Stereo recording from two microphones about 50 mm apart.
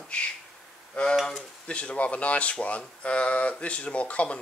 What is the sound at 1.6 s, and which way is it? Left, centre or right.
Speech, left.